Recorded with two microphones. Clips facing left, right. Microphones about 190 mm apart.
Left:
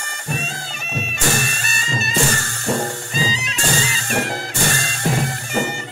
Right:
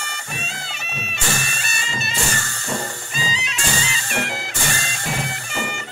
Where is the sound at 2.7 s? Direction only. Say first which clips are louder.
Left 6 dB; 60° left (ahead or behind).